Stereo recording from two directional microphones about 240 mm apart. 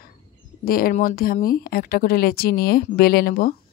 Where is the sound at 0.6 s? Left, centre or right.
Left.